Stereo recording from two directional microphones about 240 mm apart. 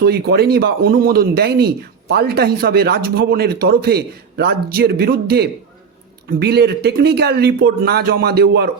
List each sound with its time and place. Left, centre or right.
0.0 s speech: right